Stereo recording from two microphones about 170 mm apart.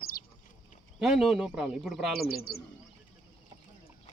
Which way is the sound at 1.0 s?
Centre (ahead or behind).